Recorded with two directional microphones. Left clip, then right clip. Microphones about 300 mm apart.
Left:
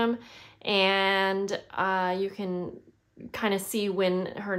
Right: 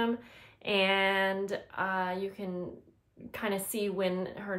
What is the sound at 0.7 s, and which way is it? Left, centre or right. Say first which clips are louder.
A woman's voice: left 4 dB; centre.